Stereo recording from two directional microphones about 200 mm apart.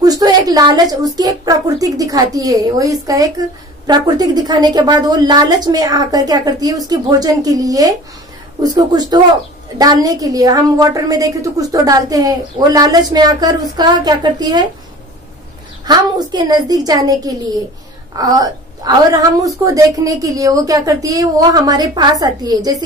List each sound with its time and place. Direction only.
0.0 s a woman's voice: 20° right (ahead or behind)
15.8 s a woman's voice: 20° right (ahead or behind)